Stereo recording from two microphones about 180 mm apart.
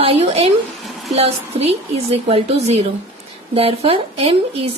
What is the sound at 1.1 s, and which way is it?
A woman's voice, 35° right (ahead or behind).